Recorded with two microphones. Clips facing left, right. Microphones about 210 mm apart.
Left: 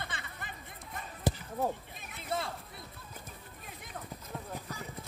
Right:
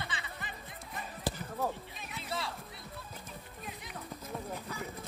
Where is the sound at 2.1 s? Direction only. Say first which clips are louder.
Left 3 dB; 50° left (ahead or behind).